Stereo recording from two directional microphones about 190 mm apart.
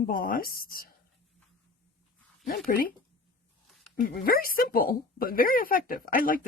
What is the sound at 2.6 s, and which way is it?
Speech, 50° left (ahead or behind).